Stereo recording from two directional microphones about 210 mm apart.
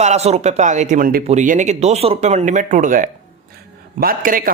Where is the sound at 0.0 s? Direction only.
30° right (ahead or behind).